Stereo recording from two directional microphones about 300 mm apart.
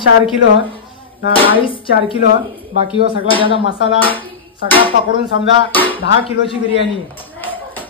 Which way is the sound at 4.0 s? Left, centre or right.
Centre.